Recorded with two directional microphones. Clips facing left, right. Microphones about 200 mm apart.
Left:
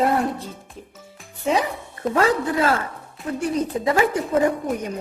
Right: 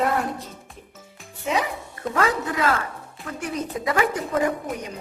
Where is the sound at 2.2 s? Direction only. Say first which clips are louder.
Left 4 dB; 30° left (ahead or behind).